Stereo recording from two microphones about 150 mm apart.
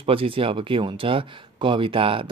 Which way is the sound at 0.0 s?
40° right (ahead or behind).